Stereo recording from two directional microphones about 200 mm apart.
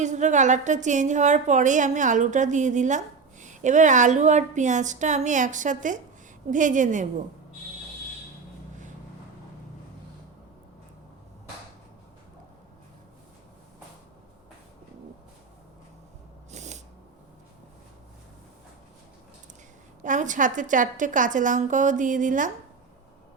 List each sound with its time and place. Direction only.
0.0 s a woman's voice: 35° right (ahead or behind)
16.5 s a sound: 35° right (ahead or behind)
20.1 s a woman's voice: 40° right (ahead or behind)